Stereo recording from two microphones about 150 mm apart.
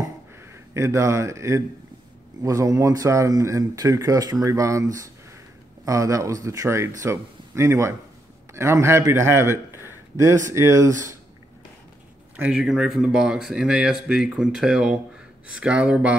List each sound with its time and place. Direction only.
0.4 s a man's voice: 20° right (ahead or behind)
12.4 s speech: 5° right (ahead or behind)